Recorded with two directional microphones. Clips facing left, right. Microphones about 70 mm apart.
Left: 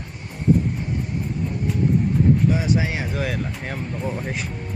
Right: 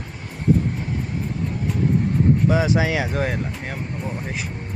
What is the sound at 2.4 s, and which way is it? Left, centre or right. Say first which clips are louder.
Speech: right 2 dB; right.